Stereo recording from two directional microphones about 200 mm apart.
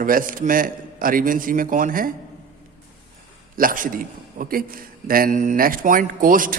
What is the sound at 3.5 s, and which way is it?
A man's voice, 45° right (ahead or behind).